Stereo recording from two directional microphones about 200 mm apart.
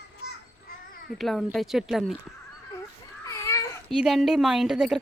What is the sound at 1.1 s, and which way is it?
A woman's voice, centre (ahead or behind).